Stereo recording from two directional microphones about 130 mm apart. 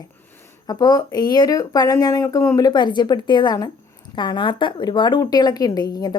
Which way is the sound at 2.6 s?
35° left (ahead or behind).